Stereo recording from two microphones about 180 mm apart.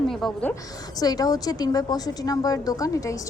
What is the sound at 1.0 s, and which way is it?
A woman's voice, 20° left (ahead or behind).